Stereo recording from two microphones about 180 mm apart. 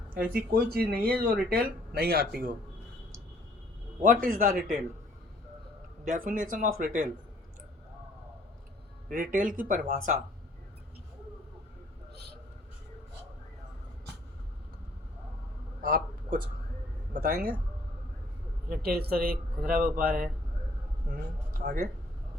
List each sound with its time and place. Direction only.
0.5 s speech: 55° right (ahead or behind)
4.0 s speech: 50° right (ahead or behind)
6.1 s speech: 50° right (ahead or behind)
9.1 s speech: 50° right (ahead or behind)
15.8 s a sound: 50° right (ahead or behind)
17.2 s speech: 50° right (ahead or behind)
18.7 s speech: 55° right (ahead or behind)
21.6 s speech: 55° right (ahead or behind)